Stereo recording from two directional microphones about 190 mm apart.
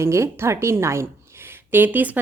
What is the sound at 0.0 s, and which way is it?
A woman's voice, 15° right (ahead or behind).